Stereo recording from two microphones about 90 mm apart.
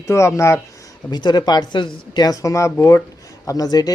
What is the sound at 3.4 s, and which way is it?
Speech, 40° left (ahead or behind).